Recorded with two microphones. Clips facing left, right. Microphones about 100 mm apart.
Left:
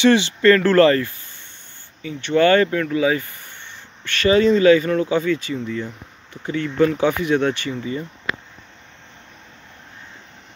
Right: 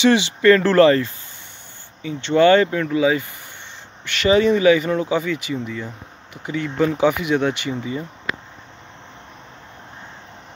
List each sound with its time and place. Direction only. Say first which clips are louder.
0.0 s speech: even; 15° right (ahead or behind)